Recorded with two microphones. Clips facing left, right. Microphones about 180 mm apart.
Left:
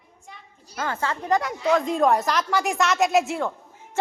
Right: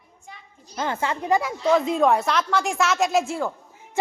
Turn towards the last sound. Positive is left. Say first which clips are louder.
# even
turn(degrees=-5)  # may be behind; listen again after turning